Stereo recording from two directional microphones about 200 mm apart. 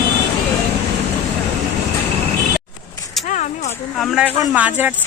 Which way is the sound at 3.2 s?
40° left (ahead or behind).